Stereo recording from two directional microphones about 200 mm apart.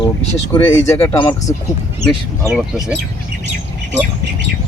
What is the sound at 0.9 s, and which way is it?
Speech, 15° left (ahead or behind).